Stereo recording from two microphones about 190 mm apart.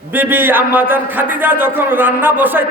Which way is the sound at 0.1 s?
10° right (ahead or behind).